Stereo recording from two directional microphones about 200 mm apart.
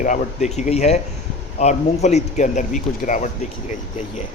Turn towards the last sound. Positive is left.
turn(degrees=40)  # may be behind; listen again after turning